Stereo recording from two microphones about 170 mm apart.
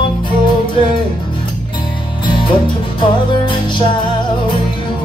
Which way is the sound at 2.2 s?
30° left (ahead or behind).